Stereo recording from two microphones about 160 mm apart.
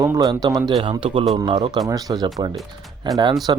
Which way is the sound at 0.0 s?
25° right (ahead or behind).